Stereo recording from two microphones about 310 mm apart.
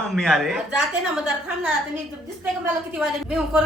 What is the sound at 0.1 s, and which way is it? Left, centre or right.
A woman's voice, centre.